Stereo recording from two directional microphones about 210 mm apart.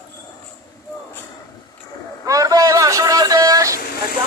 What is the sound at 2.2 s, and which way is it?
Vehicle, 15° right (ahead or behind).